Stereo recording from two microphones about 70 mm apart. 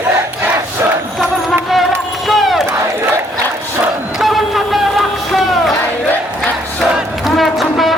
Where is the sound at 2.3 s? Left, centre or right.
Centre.